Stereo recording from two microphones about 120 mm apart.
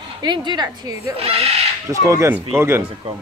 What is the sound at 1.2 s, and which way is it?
Speech, 55° right (ahead or behind).